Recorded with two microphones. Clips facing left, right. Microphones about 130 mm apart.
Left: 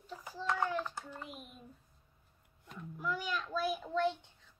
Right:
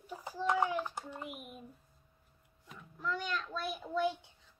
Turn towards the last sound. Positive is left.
turn(degrees=-10)  # may be behind; listen again after turning